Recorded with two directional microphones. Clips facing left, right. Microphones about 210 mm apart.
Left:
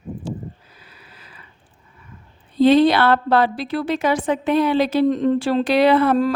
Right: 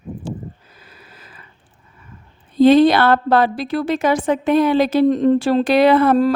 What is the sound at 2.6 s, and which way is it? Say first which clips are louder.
A woman's voice: right 3 dB; 45° right (ahead or behind).